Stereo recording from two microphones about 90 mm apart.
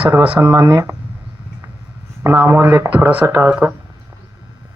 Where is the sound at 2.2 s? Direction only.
30° right (ahead or behind).